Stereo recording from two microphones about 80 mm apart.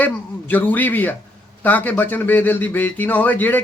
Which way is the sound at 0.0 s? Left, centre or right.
Left.